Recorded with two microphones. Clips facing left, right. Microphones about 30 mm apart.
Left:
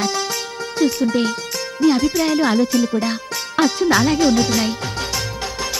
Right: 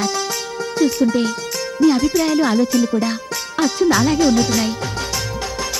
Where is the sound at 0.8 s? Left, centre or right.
Left.